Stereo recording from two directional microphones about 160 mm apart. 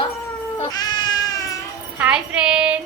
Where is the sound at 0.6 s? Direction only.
25° left (ahead or behind).